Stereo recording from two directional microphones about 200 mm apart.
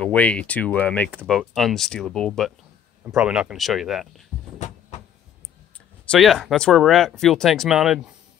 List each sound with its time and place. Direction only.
0.0 s speech: 5° left (ahead or behind)
4.6 s cupboard open or close: 35° left (ahead or behind)
6.0 s speech: centre (ahead or behind)